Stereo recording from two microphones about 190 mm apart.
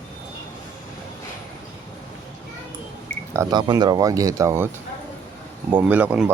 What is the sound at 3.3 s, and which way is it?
Speech, 20° right (ahead or behind).